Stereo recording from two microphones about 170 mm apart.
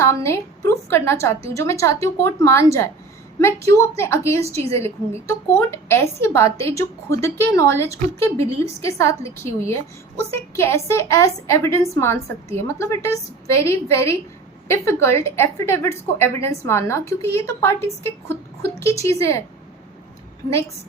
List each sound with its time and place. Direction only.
0.0 s a woman's voice: 15° left (ahead or behind)